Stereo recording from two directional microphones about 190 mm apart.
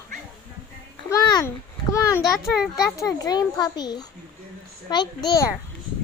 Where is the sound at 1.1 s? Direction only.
20° left (ahead or behind).